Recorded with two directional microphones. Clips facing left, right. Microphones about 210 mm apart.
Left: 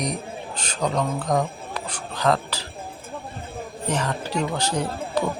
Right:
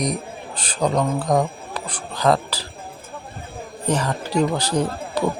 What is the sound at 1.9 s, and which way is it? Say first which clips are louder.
Speech: right 3 dB; 35° right (ahead or behind).